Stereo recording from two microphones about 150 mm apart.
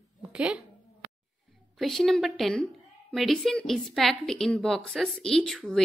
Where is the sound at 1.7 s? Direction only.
Centre (ahead or behind).